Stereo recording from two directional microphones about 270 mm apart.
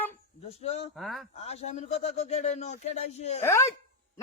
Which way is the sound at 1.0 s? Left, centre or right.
Centre.